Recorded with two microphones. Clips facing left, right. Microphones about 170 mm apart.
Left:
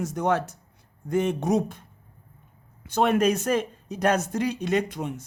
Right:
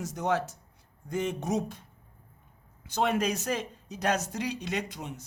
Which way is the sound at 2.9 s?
55° left (ahead or behind).